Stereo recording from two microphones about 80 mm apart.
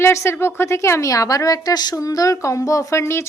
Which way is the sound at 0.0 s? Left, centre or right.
Left.